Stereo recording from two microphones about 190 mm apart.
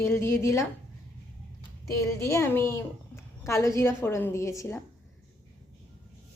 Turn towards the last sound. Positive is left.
turn(degrees=15)  # may be behind; listen again after turning